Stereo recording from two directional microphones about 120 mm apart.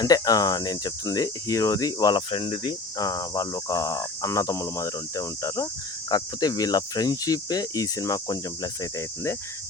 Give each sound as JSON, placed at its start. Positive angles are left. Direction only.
{"t": 0.0, "sound": "speech", "side_deg": 30}
{"t": 3.0, "sound": "speech", "side_deg": 30}